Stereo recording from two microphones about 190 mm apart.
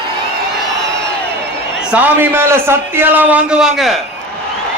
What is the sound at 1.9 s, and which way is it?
A man's voice, 10° right (ahead or behind).